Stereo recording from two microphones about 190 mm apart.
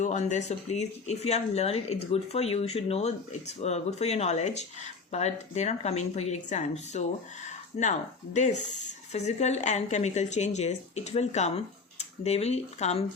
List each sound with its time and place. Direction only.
0.0 s speech: 40° left (ahead or behind)